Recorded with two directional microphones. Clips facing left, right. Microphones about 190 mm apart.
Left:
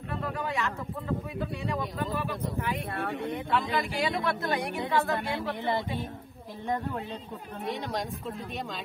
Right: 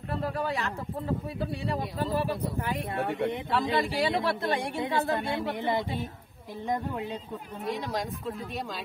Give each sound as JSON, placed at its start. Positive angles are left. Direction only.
{"t": 0.1, "sound": "speech", "side_deg": -35}
{"t": 3.0, "sound": "a woman's voice", "side_deg": -20}
{"t": 3.7, "sound": "a woman's voice", "side_deg": -30}
{"t": 7.6, "sound": "speech", "side_deg": 0}